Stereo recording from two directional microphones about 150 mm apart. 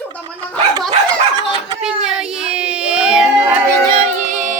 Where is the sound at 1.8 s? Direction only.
5° right (ahead or behind).